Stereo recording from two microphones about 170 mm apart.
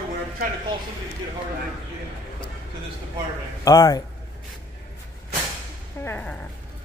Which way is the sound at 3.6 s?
20° left (ahead or behind).